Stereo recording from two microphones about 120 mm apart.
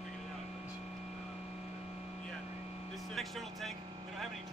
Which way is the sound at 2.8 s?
Centre (ahead or behind).